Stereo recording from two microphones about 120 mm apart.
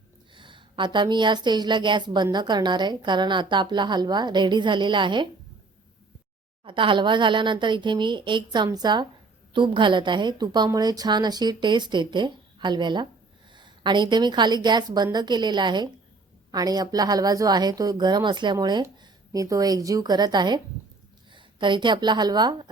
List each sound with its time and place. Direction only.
0.3 s a woman's voice: 45° right (ahead or behind)
6.7 s a woman's voice: 45° right (ahead or behind)